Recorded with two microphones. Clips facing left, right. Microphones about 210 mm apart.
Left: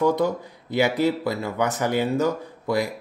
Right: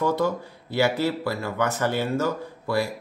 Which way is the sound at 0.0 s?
15° left (ahead or behind).